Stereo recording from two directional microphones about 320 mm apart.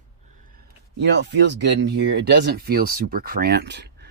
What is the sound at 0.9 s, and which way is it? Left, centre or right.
Speech, right.